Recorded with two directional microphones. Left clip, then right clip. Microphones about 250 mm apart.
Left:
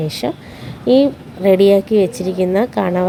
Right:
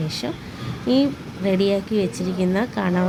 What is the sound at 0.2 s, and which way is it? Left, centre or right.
A woman's voice, left.